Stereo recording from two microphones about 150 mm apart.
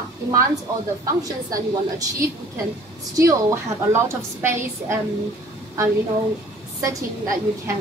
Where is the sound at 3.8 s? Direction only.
15° right (ahead or behind).